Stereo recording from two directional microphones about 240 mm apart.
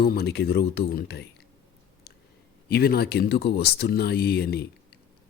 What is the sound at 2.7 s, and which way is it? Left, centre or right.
Speech, left.